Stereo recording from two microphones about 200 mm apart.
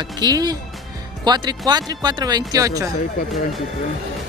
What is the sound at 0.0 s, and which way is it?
Speech, 20° right (ahead or behind).